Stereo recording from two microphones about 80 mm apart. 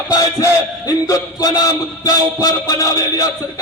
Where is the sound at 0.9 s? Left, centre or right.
Left.